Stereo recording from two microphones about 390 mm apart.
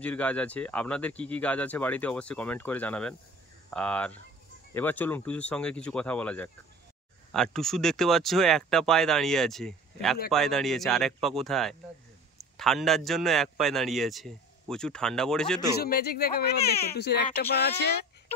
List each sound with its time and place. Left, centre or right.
0.0 s a man's voice: centre
15.8 s speech: left